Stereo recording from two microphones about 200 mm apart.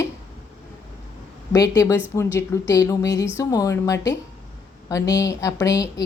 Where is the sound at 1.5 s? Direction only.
15° left (ahead or behind).